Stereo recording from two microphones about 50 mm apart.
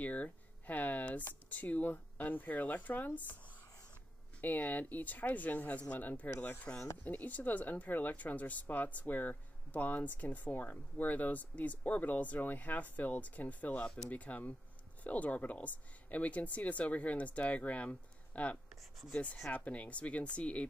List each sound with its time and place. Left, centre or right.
0.0 s speech: left
4.4 s speech: left
18.8 s speech: centre
19.5 s speech: left